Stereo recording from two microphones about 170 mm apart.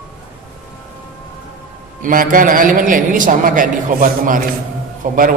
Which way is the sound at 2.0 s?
55° right (ahead or behind).